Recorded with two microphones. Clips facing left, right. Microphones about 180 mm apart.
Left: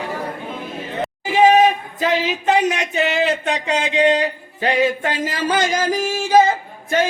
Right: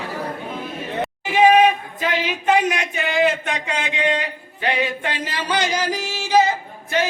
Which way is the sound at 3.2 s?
35° left (ahead or behind).